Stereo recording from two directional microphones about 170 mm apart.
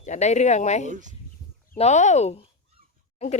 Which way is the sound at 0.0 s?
45° left (ahead or behind).